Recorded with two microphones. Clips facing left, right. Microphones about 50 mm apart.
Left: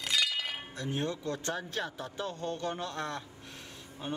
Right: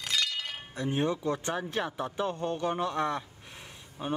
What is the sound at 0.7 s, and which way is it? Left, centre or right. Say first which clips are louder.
Speech: right 6 dB; right.